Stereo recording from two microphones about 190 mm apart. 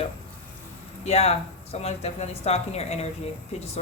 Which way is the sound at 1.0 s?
35° left (ahead or behind).